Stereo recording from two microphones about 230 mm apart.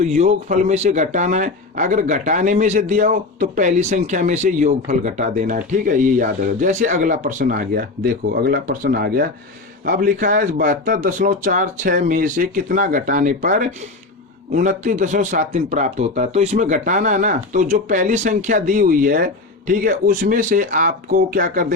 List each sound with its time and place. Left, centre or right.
0.0 s speech: right